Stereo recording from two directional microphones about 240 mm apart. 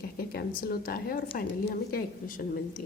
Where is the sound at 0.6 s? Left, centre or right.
Left.